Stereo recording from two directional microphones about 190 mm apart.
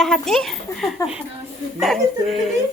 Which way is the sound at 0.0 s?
Centre (ahead or behind).